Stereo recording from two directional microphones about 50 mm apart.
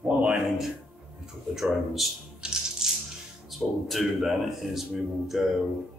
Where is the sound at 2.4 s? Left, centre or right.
Centre.